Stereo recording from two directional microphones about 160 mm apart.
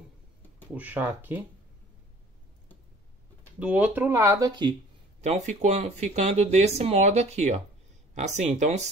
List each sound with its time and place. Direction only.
0.7 s speech: 10° right (ahead or behind)
3.5 s speech: 10° right (ahead or behind); by 4.7 s 25° right (ahead or behind)
5.2 s speech: 45° right (ahead or behind)